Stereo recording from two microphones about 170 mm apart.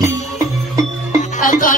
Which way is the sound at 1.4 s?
55° left (ahead or behind).